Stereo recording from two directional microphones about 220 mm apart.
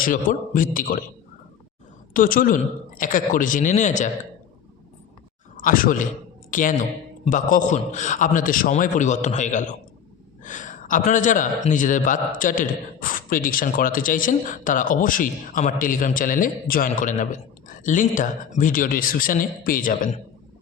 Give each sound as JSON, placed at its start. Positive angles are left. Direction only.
{"t": 0.0, "sound": "a man's voice", "side_deg": 40}
{"t": 2.1, "sound": "a man's voice", "side_deg": 40}
{"t": 5.5, "sound": "a man's voice", "side_deg": 40}